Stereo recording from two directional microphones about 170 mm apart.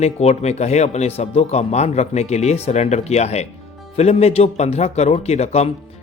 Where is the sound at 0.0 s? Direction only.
40° left (ahead or behind).